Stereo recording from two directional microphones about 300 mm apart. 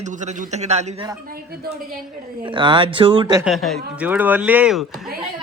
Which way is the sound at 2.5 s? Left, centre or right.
Centre.